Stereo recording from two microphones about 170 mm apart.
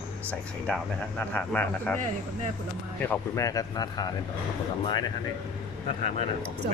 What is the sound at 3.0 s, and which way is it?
Speech, 15° left (ahead or behind).